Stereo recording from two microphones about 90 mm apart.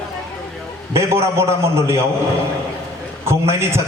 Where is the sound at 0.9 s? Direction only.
30° right (ahead or behind).